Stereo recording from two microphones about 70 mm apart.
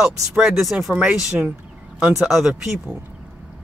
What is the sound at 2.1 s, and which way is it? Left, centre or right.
Speech, centre.